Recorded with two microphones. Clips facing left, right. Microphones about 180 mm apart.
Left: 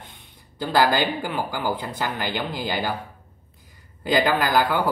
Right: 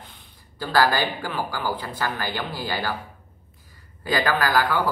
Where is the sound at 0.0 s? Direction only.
20° left (ahead or behind).